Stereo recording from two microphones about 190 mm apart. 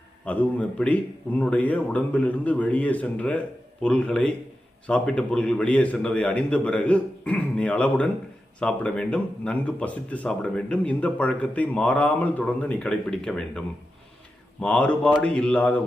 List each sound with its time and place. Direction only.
0.3 s speech: 5° left (ahead or behind)